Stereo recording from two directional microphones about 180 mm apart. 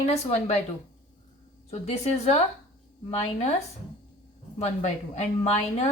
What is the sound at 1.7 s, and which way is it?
Speech, 35° left (ahead or behind).